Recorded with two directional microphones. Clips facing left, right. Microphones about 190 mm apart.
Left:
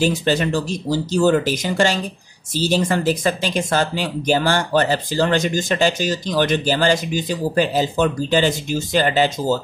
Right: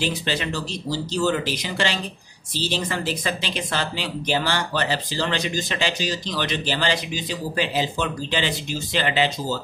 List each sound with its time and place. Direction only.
0.0 s speech: 45° left (ahead or behind)